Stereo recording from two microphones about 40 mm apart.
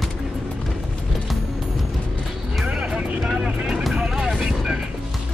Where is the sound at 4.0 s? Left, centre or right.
Centre.